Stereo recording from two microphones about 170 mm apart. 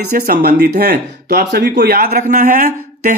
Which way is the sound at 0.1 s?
70° right (ahead or behind).